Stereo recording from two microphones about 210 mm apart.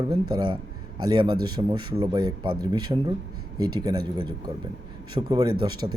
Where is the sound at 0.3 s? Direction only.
20° right (ahead or behind).